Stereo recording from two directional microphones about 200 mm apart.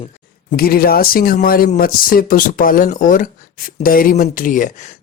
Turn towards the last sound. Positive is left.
turn(degrees=40)  # may be behind; listen again after turning